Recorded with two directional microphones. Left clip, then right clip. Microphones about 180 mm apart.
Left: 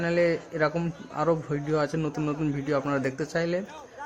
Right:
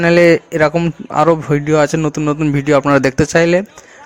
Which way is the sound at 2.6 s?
45° right (ahead or behind).